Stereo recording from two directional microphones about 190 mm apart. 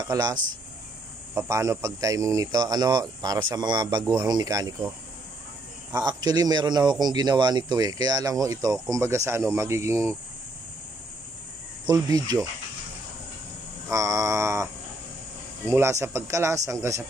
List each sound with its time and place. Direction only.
0.0 s a man's voice: 20° right (ahead or behind)
11.9 s a man's voice: 20° right (ahead or behind)
13.8 s speech: 15° right (ahead or behind)